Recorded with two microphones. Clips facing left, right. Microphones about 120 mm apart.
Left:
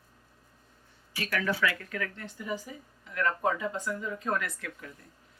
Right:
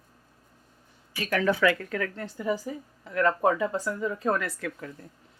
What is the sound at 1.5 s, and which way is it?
Speech, 45° right (ahead or behind).